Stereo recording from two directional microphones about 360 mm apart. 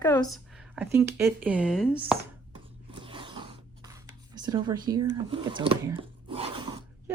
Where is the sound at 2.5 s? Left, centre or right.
Centre.